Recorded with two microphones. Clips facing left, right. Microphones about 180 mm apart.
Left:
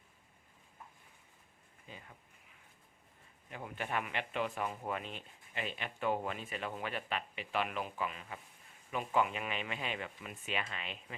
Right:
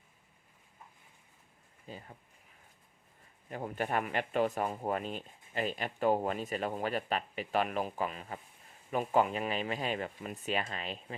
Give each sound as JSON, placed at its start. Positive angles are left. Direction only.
{"t": 1.9, "sound": "speech", "side_deg": -35}
{"t": 3.5, "sound": "speech", "side_deg": -40}